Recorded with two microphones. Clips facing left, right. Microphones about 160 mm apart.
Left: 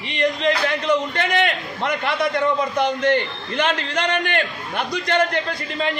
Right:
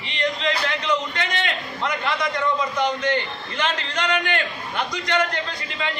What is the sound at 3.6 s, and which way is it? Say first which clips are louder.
A man's voice: left 4 dB; 55° left (ahead or behind).